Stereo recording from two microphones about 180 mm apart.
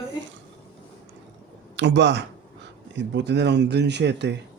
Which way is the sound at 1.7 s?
80° right.